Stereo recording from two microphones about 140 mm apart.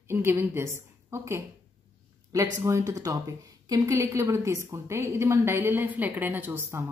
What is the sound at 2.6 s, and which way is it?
Speech, 20° right (ahead or behind).